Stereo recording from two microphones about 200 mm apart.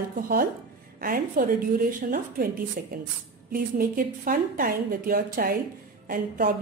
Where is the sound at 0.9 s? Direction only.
45° right (ahead or behind).